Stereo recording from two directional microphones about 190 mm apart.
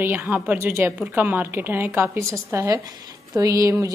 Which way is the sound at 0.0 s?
10° right (ahead or behind).